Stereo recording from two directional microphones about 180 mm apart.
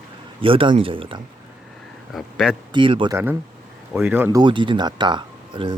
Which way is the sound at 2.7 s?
30° right (ahead or behind).